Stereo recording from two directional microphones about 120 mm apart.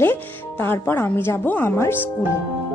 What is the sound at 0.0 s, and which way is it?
Speech, 20° left (ahead or behind).